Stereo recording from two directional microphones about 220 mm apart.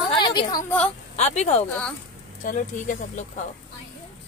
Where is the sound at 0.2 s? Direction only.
20° left (ahead or behind).